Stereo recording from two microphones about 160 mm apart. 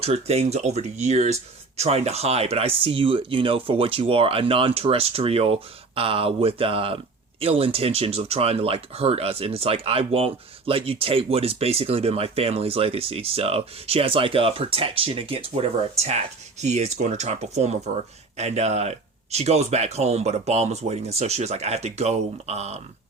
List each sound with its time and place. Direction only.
0.0 s speech: 40° right (ahead or behind)